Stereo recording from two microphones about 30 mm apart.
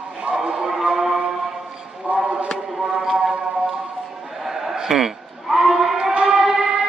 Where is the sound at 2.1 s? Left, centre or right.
Right.